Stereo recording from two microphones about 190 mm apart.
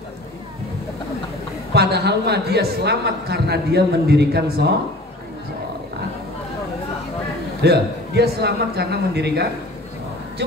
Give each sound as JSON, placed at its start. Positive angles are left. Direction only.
{"t": 1.7, "sound": "a woman's voice", "side_deg": -60}
{"t": 7.6, "sound": "a woman's voice", "side_deg": -60}